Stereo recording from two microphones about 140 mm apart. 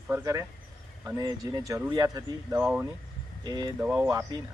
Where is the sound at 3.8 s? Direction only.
15° right (ahead or behind).